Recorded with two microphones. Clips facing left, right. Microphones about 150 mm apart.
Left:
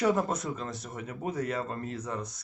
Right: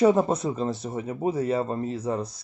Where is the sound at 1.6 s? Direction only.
35° right (ahead or behind).